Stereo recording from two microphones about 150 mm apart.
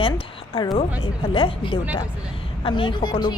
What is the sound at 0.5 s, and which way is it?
A woman's voice, 25° left (ahead or behind).